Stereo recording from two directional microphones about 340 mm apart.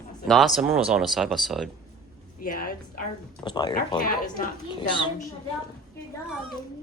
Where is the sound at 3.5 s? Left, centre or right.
Centre.